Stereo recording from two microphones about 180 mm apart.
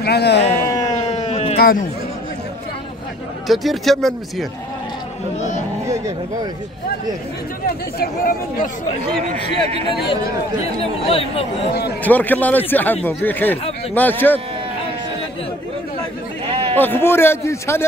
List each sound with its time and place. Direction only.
0.0 s speech: 65° left (ahead or behind)
0.6 s a sound: 15° left (ahead or behind)
0.9 s a sound: 35° left (ahead or behind)
3.4 s a man's voice: centre (ahead or behind)
7.6 s speech: 55° left (ahead or behind)
9.3 s a man's voice: 35° right (ahead or behind)
10.6 s speech: 35° left (ahead or behind)
12.0 s a man's voice: 10° left (ahead or behind)
16.4 s a sound: 35° right (ahead or behind)
16.7 s a man's voice: 10° left (ahead or behind)